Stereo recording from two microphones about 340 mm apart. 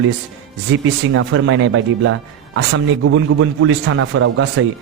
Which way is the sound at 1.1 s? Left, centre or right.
Right.